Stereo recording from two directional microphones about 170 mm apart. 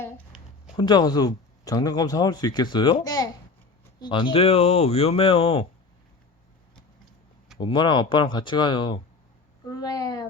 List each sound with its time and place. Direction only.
0.8 s speech: 25° left (ahead or behind)
7.6 s speech: 25° left (ahead or behind)
9.6 s a sound: 20° left (ahead or behind)